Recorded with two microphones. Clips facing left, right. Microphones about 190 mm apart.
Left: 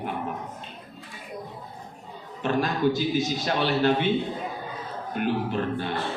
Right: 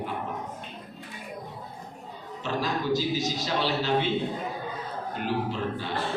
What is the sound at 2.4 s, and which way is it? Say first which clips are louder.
A man's voice: left 4 dB; 55° left (ahead or behind).